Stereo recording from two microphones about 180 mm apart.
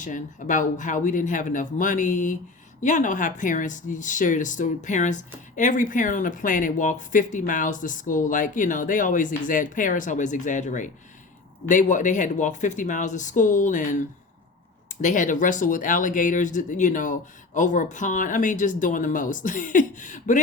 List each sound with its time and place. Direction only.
0.0 s speech: 45° left (ahead or behind)
14.8 s speech: 45° left (ahead or behind)